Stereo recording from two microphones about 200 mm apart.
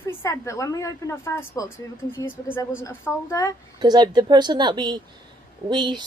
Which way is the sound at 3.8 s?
20° right (ahead or behind).